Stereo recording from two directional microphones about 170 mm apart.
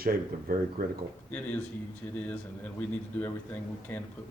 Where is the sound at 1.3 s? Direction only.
10° left (ahead or behind).